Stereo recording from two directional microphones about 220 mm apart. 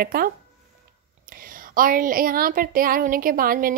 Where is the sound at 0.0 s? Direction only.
45° right (ahead or behind).